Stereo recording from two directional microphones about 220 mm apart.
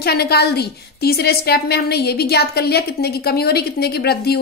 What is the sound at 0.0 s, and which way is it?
A woman's voice, 45° left (ahead or behind).